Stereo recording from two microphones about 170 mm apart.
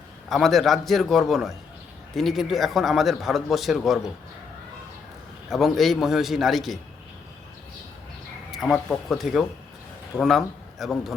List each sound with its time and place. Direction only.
0.3 s speech: centre (ahead or behind)
5.5 s speech: centre (ahead or behind)
8.5 s a man's voice: centre (ahead or behind)